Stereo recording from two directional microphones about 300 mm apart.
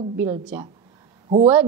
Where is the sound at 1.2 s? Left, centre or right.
Right.